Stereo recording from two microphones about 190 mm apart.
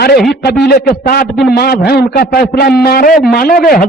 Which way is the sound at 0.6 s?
50° left (ahead or behind).